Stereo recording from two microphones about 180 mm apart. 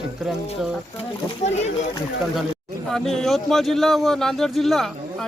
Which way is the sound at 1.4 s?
40° left (ahead or behind).